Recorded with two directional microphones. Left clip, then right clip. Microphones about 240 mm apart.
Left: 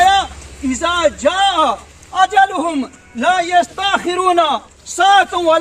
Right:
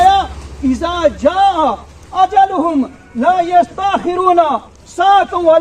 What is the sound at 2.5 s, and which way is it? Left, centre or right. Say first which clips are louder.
A man's voice: right 4 dB; centre.